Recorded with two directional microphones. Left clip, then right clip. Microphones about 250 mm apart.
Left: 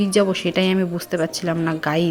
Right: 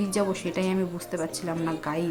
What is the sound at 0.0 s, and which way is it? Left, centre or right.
Speech, centre.